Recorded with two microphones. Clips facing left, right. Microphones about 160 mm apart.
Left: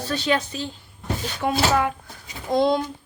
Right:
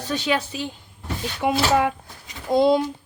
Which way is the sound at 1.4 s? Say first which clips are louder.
Right 2 dB; 20° right (ahead or behind).